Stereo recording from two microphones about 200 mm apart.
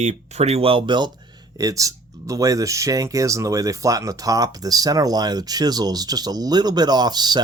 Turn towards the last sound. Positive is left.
turn(degrees=-20)  # may be behind; listen again after turning